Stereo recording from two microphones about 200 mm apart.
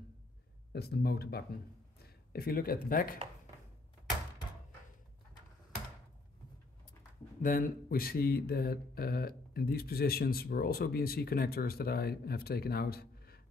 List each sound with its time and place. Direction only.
0.7 s speech: 50° left (ahead or behind)
7.4 s speech: 45° left (ahead or behind)